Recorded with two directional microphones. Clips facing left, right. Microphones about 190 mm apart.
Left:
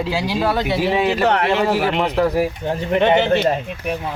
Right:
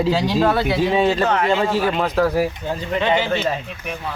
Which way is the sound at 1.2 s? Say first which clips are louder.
Left 1 dB; 65° left (ahead or behind).